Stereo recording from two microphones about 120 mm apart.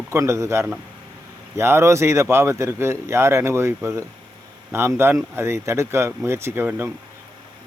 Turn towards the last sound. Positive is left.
turn(degrees=-20)  # may be behind; listen again after turning